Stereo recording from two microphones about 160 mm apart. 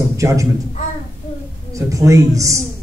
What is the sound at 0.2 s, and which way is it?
Speech, 20° right (ahead or behind).